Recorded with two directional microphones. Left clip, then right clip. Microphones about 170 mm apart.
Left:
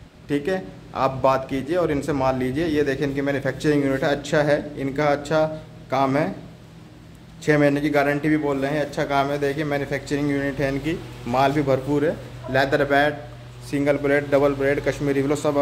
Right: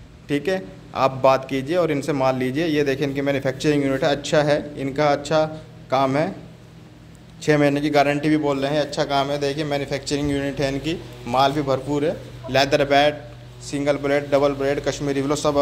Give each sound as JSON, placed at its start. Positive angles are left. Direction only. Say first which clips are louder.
{"t": 0.3, "sound": "a man's voice", "louder": "right 1 dB", "side_deg": 0}
{"t": 7.4, "sound": "a man's voice", "louder": "even", "side_deg": 0}
{"t": 11.5, "sound": "a man's voice", "louder": "left 1 dB", "side_deg": 25}
{"t": 12.5, "sound": "a man's voice", "louder": "right 2 dB", "side_deg": 0}
{"t": 13.7, "sound": "a man's voice", "louder": "left 1 dB", "side_deg": 20}